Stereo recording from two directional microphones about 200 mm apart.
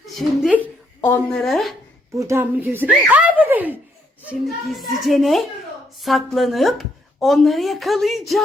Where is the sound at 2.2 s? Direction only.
15° right (ahead or behind).